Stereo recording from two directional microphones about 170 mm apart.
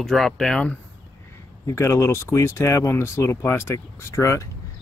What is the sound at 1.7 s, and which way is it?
A man's voice, 15° left (ahead or behind).